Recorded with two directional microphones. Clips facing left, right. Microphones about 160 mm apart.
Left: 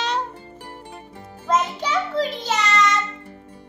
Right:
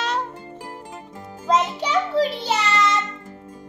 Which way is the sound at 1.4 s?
15° right (ahead or behind).